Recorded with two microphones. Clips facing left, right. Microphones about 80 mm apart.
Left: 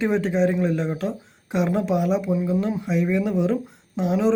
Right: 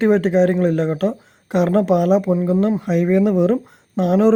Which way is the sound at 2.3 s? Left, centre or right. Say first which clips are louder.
Right 5 dB; right.